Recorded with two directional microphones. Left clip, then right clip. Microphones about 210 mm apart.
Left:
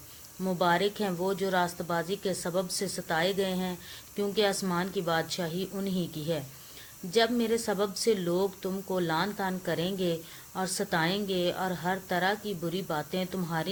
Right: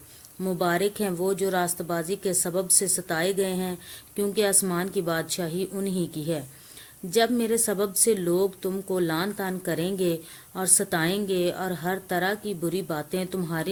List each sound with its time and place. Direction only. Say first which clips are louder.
0.4 s a woman's voice: right 2 dB; 40° right (ahead or behind)